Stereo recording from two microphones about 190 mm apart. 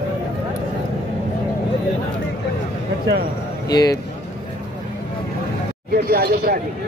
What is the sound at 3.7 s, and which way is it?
Speech, 20° left (ahead or behind).